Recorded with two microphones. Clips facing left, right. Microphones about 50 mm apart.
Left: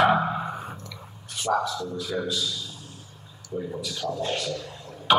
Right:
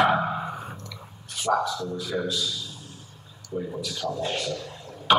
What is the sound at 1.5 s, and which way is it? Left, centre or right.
Speech, centre.